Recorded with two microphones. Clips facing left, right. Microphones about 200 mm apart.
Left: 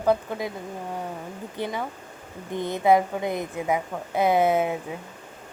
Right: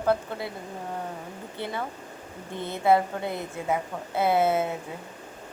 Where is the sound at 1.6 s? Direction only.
15° left (ahead or behind).